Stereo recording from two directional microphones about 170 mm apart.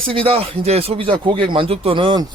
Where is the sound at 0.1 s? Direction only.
35° right (ahead or behind).